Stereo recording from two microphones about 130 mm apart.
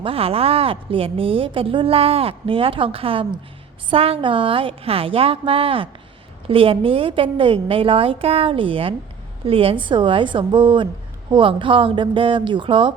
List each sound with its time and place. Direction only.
0.0 s a woman's voice: 50° right (ahead or behind)